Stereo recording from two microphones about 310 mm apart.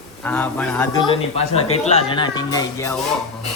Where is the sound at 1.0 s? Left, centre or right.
Centre.